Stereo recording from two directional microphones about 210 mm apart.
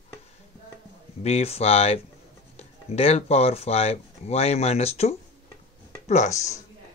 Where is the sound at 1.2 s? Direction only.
30° left (ahead or behind).